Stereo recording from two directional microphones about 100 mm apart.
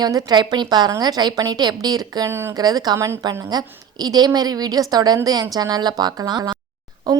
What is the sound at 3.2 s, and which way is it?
A woman's voice, 40° right (ahead or behind).